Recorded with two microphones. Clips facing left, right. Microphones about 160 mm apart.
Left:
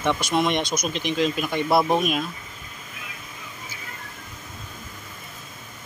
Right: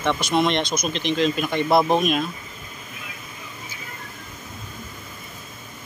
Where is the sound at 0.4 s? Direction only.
10° left (ahead or behind).